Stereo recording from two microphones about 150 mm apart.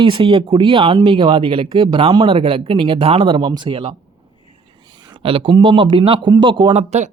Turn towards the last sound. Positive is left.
turn(degrees=-50)  # may be behind; listen again after turning